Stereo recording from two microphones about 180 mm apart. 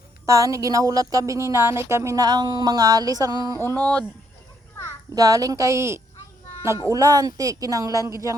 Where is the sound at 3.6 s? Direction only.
10° left (ahead or behind).